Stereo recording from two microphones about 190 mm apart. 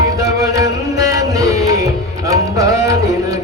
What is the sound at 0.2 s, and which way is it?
Music, 15° right (ahead or behind).